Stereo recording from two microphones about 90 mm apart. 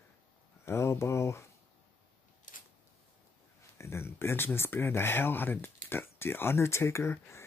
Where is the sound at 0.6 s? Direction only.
30° left (ahead or behind).